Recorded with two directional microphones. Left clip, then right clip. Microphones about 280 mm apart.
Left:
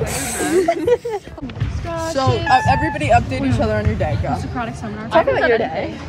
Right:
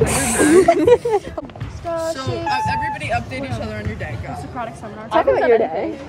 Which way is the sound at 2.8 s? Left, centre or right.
Centre.